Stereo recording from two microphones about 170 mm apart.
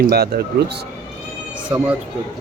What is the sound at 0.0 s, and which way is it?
Speech, 65° right (ahead or behind).